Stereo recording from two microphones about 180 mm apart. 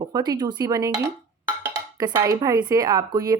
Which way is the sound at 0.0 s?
20° right (ahead or behind).